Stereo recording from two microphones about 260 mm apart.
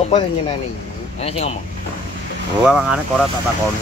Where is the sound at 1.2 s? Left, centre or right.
Left.